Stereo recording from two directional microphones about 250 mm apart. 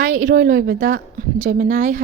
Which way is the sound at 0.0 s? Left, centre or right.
Right.